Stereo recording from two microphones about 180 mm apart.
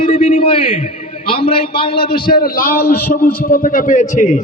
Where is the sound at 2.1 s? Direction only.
55° left (ahead or behind).